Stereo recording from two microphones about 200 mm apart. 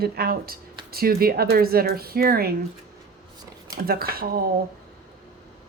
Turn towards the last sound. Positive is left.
turn(degrees=-50)  # may be behind; listen again after turning